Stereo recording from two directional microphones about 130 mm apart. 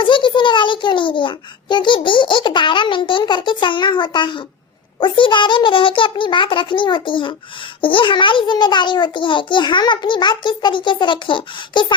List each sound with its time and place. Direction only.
0.0 s a child's voice: 40° left (ahead or behind)